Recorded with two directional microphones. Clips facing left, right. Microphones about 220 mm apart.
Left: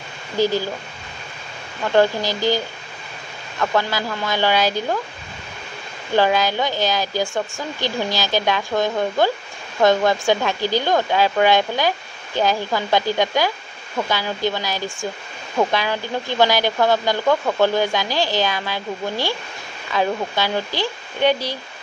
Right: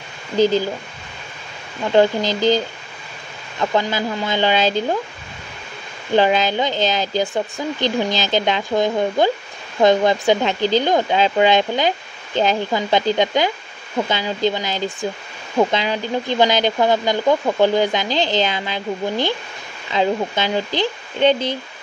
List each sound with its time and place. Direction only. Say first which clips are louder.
0.4 s speech: right 4 dB; 20° right (ahead or behind)
2.0 s speech: right 2 dB; 20° right (ahead or behind)
6.1 s speech: right 2 dB; 20° right (ahead or behind)